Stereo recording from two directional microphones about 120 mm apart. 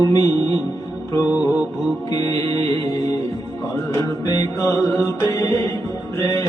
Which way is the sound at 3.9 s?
25° left (ahead or behind).